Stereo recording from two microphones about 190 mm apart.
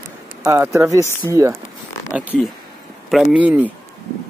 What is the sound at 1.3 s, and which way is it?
Speech, 15° right (ahead or behind).